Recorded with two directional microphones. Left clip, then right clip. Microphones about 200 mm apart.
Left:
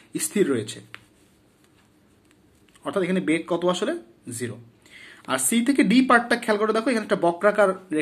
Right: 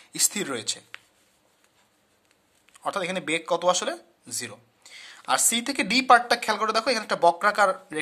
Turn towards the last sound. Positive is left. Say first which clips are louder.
# left 2 dB
turn(degrees=-50)  # may be behind; listen again after turning